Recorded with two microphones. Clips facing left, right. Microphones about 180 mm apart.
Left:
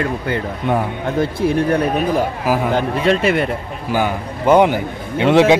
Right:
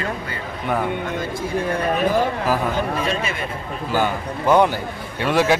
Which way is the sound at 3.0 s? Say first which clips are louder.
Left 9 dB; 70° left (ahead or behind).